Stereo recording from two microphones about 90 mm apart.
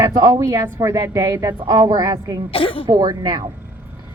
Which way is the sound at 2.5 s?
90° left.